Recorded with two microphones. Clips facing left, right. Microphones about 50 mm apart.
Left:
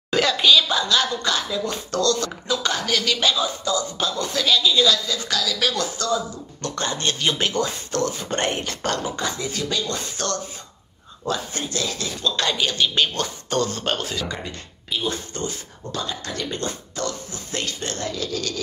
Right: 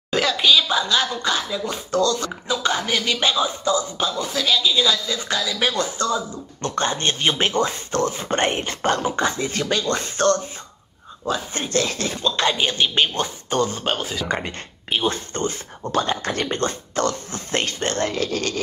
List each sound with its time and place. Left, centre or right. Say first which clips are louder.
0.1 s speech: even; centre; by 4.1 s right
4.2 s a woman's voice: left 2 dB; centre; by 10.4 s right
11.5 s speech: right 4 dB; right
12.2 s a woman's voice: right 2 dB; right; by 14.2 s centre
14.2 s speech: right 5 dB; right